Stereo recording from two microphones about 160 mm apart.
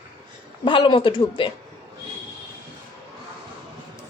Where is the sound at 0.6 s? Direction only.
30° left (ahead or behind).